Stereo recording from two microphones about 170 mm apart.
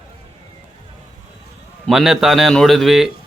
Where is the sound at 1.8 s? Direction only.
Centre (ahead or behind).